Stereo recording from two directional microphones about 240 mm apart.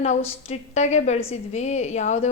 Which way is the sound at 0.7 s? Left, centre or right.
Left.